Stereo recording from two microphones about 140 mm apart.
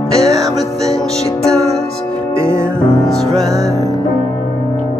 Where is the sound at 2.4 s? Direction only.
20° right (ahead or behind).